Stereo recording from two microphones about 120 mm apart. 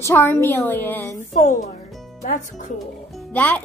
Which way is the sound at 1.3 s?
90° left.